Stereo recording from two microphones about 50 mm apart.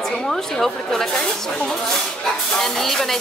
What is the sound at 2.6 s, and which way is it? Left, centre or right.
Music, centre.